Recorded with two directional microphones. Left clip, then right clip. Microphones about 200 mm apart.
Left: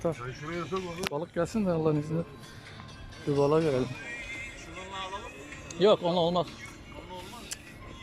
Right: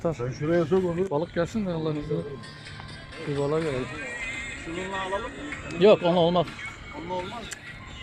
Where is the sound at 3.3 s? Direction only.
5° left (ahead or behind).